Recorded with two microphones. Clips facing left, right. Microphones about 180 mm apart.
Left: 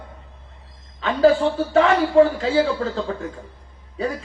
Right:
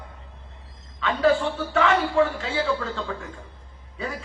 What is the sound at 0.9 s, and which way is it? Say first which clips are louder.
A man's voice: left 5 dB; 35° left (ahead or behind).